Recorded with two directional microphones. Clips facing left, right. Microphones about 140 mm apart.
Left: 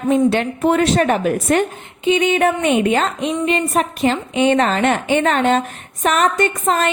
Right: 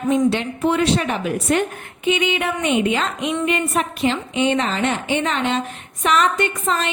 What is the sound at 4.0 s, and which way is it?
A woman's voice, 50° left (ahead or behind).